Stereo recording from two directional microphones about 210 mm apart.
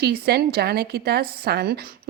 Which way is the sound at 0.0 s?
50° right (ahead or behind).